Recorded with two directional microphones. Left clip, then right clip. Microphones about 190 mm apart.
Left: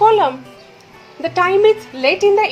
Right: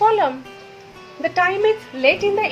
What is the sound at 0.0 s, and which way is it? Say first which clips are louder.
A woman's voice: left 4 dB; 20° left (ahead or behind).